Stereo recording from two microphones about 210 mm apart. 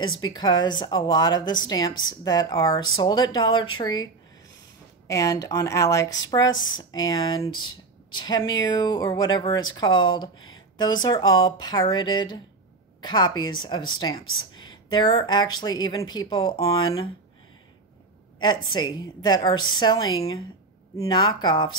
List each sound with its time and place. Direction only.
0.2 s speech: 20° left (ahead or behind)
14.5 s a sound: 20° left (ahead or behind)
15.5 s speech: 20° left (ahead or behind)
18.4 s speech: 20° left (ahead or behind)